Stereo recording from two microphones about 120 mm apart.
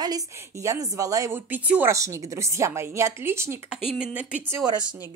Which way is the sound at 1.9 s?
25° right (ahead or behind).